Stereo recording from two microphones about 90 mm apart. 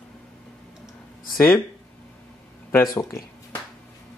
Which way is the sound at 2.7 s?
35° left (ahead or behind).